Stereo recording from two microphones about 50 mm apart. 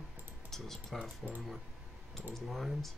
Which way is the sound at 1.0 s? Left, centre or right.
Right.